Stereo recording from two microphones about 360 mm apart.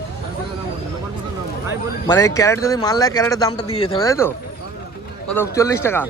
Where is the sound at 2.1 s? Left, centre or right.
Centre.